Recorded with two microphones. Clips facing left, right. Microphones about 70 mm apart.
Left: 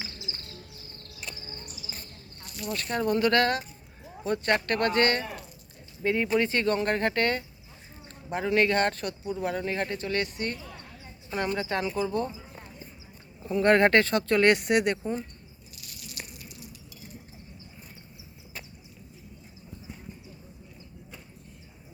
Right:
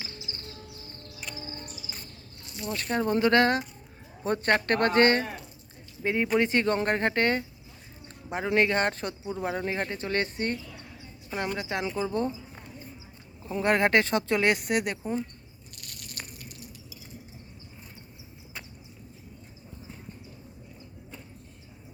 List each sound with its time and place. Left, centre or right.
2.5 s a man's voice: right
11.3 s speech: centre
13.4 s speech: centre
14.0 s speech: centre
14.5 s speech: centre
15.7 s a sound: right